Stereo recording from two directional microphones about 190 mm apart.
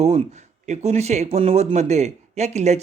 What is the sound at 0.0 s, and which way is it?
Speech, 35° right (ahead or behind).